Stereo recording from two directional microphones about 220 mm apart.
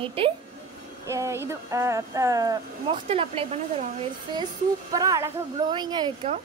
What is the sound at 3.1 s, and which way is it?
Speech, 25° right (ahead or behind).